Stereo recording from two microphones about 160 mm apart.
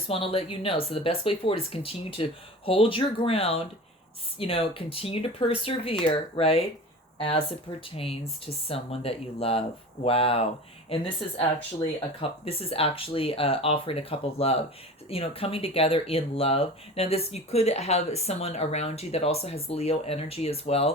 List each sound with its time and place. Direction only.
0.1 s speech: 35° left (ahead or behind)
12.5 s speech: 35° left (ahead or behind)